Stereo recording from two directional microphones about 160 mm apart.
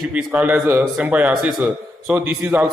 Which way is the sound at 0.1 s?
10° right (ahead or behind).